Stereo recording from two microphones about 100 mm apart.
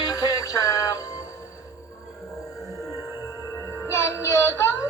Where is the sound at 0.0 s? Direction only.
40° left (ahead or behind).